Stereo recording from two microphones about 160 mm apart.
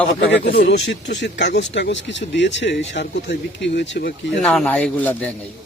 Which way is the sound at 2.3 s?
90° left.